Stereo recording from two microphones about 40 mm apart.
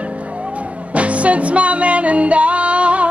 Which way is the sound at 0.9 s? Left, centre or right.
Right.